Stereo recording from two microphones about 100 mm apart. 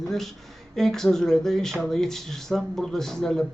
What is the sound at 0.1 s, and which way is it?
Speech, 5° left (ahead or behind).